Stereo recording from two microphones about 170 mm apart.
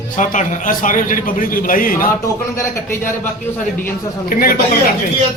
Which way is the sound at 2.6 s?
15° left (ahead or behind).